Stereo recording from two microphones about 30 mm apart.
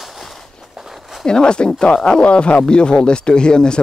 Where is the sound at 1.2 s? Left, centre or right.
Left.